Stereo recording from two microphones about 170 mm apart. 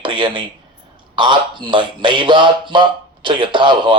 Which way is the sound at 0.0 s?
25° right (ahead or behind).